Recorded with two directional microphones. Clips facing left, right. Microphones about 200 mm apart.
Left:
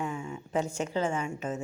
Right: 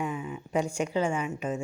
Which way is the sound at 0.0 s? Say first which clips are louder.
Right 2 dB; 15° right (ahead or behind).